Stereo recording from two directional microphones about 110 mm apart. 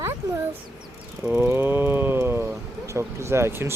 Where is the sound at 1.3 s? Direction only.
20° right (ahead or behind).